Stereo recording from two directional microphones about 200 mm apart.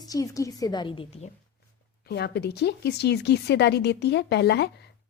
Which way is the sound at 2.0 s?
55° left (ahead or behind).